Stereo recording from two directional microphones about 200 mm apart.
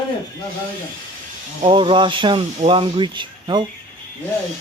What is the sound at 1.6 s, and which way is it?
Speech, 25° right (ahead or behind).